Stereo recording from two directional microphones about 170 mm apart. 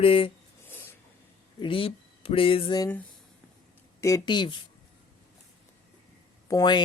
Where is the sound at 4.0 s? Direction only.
20° left (ahead or behind).